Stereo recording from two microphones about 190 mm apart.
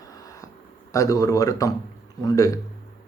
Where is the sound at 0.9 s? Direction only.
15° left (ahead or behind).